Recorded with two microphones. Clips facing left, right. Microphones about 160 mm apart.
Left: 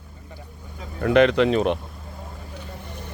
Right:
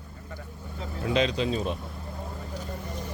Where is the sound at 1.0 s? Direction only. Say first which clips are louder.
Left 9 dB; 60° left (ahead or behind).